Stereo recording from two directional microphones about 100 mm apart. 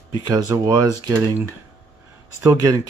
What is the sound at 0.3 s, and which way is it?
Speech, 40° right (ahead or behind).